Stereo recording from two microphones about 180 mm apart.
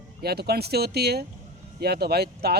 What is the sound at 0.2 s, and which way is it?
Speech, 60° right (ahead or behind).